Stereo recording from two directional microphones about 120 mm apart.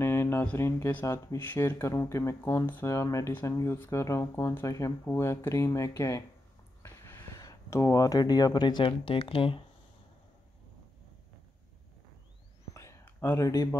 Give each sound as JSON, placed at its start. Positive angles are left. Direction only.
{"t": 0.0, "sound": "speech", "side_deg": 20}
{"t": 13.0, "sound": "speech", "side_deg": 20}